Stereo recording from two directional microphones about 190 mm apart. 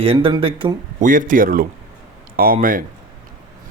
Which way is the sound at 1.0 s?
45° right (ahead or behind).